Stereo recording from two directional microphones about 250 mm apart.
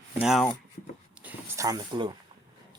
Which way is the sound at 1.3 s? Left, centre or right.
Centre.